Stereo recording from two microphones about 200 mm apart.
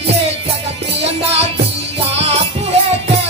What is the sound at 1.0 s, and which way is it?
Music, 30° right (ahead or behind).